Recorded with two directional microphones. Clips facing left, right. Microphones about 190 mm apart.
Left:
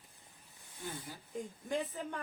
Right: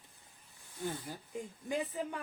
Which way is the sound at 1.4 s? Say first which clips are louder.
Even; 10° right (ahead or behind).